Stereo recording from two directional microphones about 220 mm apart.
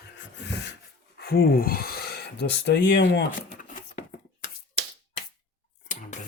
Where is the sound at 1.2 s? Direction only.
45° left (ahead or behind).